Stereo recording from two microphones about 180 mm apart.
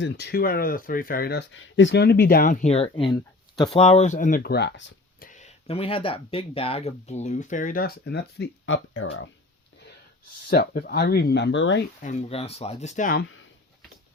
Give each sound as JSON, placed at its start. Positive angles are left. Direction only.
{"t": 0.0, "sound": "speech", "side_deg": 65}
{"t": 5.3, "sound": "speech", "side_deg": 40}
{"t": 10.5, "sound": "speech", "side_deg": 60}
{"t": 12.0, "sound": "speech", "side_deg": 35}